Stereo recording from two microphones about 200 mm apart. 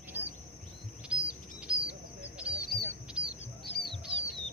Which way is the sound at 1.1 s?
5° right (ahead or behind).